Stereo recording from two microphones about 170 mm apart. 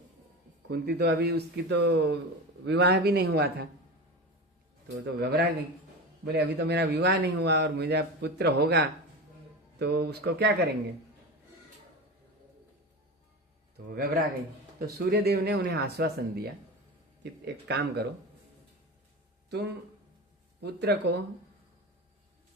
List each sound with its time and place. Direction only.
0.7 s speech: 70° right (ahead or behind)
5.2 s speech: 65° right (ahead or behind)
13.9 s speech: 60° right (ahead or behind)
17.4 s speech: 80° right
20.6 s speech: 80° right